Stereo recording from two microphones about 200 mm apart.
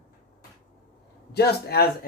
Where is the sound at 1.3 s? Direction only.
50° left (ahead or behind).